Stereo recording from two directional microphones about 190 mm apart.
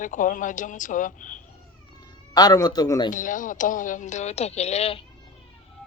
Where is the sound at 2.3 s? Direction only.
20° left (ahead or behind).